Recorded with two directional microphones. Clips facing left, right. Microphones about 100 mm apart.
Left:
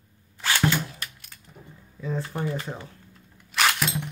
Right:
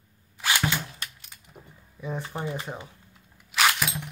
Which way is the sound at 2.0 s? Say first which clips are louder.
Left 3 dB; 20° right (ahead or behind).